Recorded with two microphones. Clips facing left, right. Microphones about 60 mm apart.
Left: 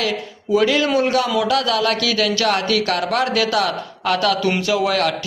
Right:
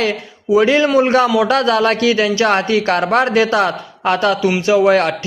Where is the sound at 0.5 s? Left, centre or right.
Right.